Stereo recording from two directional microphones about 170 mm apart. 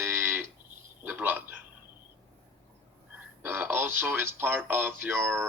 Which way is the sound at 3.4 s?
10° right (ahead or behind).